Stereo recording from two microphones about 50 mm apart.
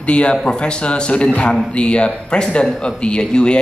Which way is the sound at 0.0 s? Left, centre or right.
Left.